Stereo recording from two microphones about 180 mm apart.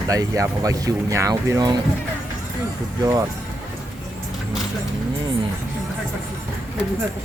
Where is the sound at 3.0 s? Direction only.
15° right (ahead or behind).